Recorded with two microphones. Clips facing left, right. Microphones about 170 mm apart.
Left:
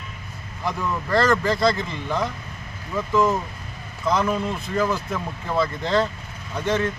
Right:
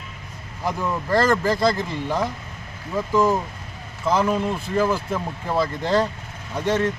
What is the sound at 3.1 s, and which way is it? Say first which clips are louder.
Speech: right 1 dB; 35° right (ahead or behind).